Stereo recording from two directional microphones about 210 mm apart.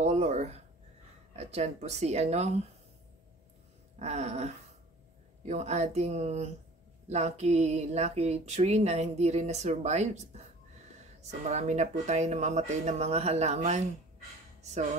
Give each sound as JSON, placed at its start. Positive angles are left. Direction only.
{"t": 0.0, "sound": "a sound", "side_deg": -30}
{"t": 1.3, "sound": "speech", "side_deg": -30}
{"t": 4.0, "sound": "speech", "side_deg": -30}
{"t": 5.5, "sound": "speech", "side_deg": -30}
{"t": 11.4, "sound": "speech", "side_deg": -35}